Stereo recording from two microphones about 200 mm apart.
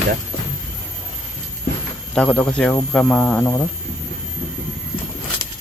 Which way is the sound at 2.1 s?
5° left (ahead or behind).